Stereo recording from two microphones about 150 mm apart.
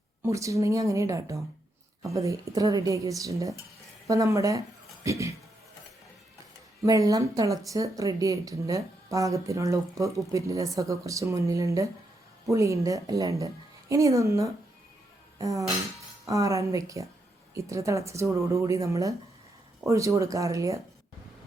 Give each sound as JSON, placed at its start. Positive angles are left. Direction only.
{"t": 0.2, "sound": "speech", "side_deg": -20}
{"t": 6.8, "sound": "speech", "side_deg": -20}